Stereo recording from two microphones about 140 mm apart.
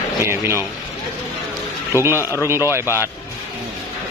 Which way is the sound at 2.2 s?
20° left (ahead or behind).